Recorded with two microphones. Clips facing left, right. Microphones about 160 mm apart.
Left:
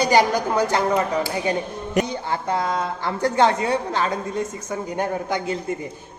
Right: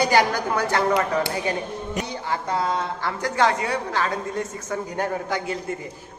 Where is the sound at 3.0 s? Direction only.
25° left (ahead or behind).